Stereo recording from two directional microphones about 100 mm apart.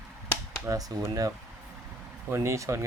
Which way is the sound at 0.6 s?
35° right (ahead or behind).